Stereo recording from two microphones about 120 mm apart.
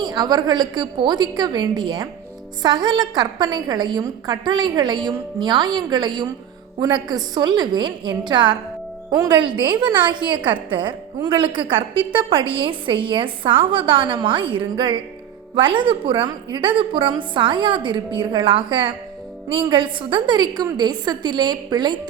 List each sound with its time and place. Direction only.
0.0 s a woman's voice: 35° right (ahead or behind)